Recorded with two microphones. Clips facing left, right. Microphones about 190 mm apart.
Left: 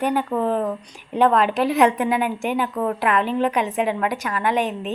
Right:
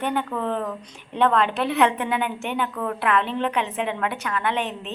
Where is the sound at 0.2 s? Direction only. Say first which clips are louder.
Left 4 dB; 35° left (ahead or behind).